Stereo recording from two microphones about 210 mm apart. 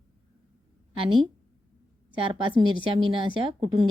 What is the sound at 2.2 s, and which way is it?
A woman's voice, 25° right (ahead or behind).